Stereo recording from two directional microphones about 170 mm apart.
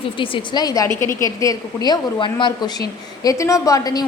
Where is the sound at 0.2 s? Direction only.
25° left (ahead or behind).